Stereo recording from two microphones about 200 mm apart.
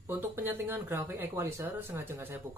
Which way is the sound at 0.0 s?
10° right (ahead or behind).